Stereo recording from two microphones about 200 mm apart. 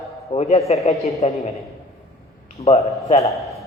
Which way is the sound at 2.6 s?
30° left (ahead or behind).